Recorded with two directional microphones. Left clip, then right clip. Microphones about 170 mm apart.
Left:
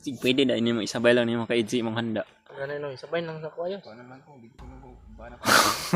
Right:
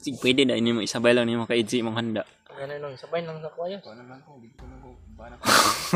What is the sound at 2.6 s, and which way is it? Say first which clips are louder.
Speech: left 2 dB; 65° left (ahead or behind).